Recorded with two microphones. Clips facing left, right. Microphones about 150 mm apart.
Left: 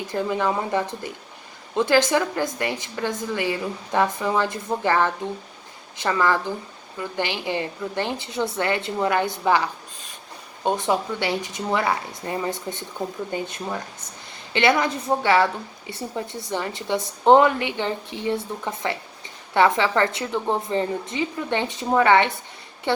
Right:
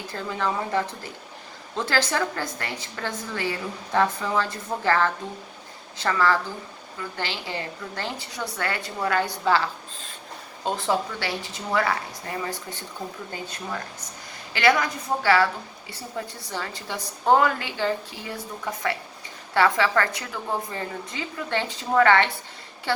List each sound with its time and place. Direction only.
0.1 s a woman's voice: 15° left (ahead or behind)
14.5 s a woman's voice: 25° left (ahead or behind)